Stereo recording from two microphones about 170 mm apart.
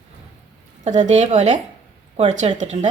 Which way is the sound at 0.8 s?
45° right (ahead or behind).